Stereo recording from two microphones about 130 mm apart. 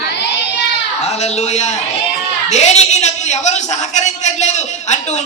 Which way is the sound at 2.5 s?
60° left (ahead or behind).